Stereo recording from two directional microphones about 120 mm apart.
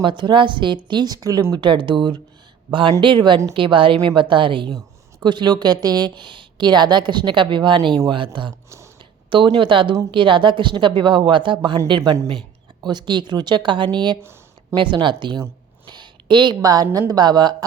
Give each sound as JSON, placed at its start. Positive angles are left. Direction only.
{"t": 0.0, "sound": "a woman's voice", "side_deg": -40}
{"t": 1.5, "sound": "a woman's voice", "side_deg": -40}
{"t": 14.2, "sound": "a sound", "side_deg": -20}
{"t": 14.8, "sound": "a woman's voice", "side_deg": -40}